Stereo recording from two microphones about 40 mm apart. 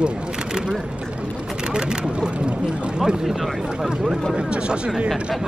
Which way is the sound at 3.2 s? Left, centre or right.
Centre.